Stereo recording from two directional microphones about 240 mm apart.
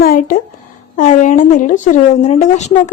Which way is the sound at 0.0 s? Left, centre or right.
Left.